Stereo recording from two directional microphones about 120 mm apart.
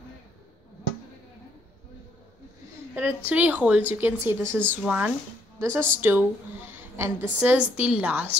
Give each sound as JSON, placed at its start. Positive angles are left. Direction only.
{"t": 2.9, "sound": "a woman's voice", "side_deg": -15}
{"t": 4.4, "sound": "speech", "side_deg": 10}
{"t": 4.6, "sound": "a woman's voice", "side_deg": -10}
{"t": 5.6, "sound": "a woman's voice", "side_deg": -20}